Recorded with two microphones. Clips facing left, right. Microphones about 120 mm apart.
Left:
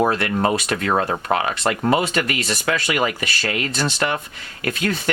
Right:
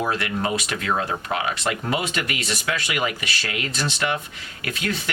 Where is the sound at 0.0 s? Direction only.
50° left (ahead or behind).